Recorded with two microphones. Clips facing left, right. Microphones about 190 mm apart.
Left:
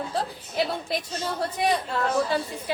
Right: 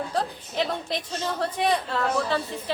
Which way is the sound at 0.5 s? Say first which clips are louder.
Left 1 dB; 10° left (ahead or behind).